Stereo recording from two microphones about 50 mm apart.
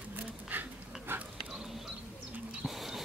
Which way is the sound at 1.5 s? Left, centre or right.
Centre.